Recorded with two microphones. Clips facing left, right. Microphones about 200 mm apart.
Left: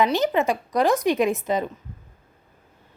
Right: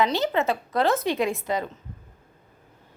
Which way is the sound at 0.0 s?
15° left (ahead or behind).